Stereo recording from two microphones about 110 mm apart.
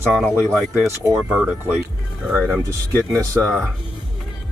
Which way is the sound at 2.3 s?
15° left (ahead or behind).